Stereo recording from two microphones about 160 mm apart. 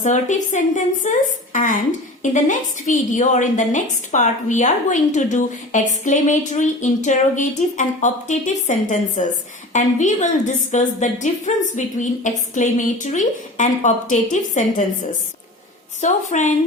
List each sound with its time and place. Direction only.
0.0 s a woman's voice: 50° left (ahead or behind)
16.0 s a woman's voice: 50° left (ahead or behind)